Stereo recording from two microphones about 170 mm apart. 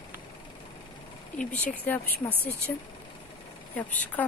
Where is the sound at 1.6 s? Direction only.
10° left (ahead or behind).